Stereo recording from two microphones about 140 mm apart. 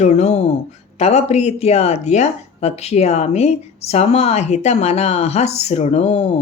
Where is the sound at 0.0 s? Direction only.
55° left (ahead or behind).